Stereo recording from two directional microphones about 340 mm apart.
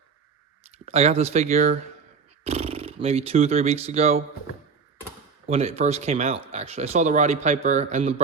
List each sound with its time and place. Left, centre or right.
0.9 s speech: centre
5.5 s speech: centre